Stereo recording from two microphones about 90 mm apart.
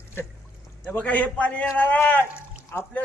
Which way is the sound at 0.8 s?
15° left (ahead or behind).